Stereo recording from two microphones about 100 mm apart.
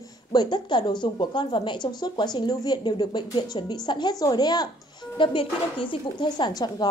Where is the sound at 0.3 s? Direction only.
45° left (ahead or behind).